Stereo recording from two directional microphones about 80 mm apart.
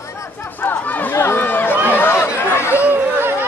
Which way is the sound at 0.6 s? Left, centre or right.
Left.